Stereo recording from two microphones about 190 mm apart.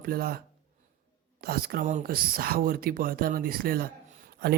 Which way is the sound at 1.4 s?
55° right (ahead or behind).